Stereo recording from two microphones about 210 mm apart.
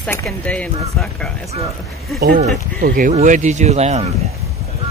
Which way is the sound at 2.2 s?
45° right (ahead or behind).